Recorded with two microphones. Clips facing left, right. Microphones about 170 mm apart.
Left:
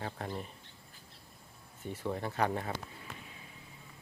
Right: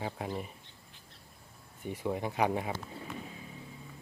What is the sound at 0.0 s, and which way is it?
Speech, 10° right (ahead or behind).